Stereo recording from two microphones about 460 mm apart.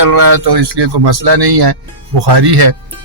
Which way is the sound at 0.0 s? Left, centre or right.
Right.